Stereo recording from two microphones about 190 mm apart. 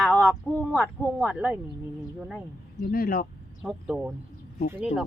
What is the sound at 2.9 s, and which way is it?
Speech, 50° left (ahead or behind).